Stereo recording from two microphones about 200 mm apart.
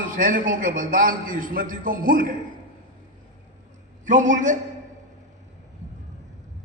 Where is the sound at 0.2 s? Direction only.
40° right (ahead or behind).